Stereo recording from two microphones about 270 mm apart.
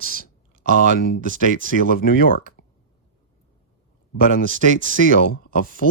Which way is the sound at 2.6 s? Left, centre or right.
Left.